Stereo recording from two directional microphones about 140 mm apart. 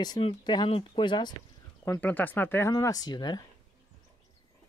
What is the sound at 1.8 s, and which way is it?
Speech, 15° left (ahead or behind).